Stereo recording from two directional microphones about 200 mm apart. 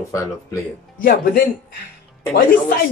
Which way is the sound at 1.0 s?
45° left (ahead or behind).